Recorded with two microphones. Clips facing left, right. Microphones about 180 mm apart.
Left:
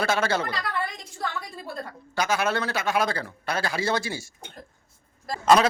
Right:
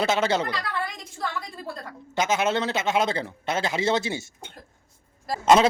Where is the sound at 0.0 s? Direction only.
20° right (ahead or behind).